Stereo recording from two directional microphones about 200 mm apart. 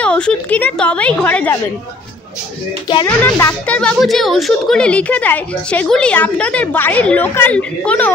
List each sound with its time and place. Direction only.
0.0 s speech: 5° left (ahead or behind)
2.9 s speech: 20° left (ahead or behind)